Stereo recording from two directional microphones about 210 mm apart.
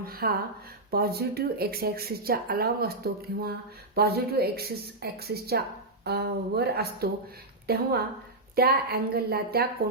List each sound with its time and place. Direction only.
0.0 s speech: 45° right (ahead or behind)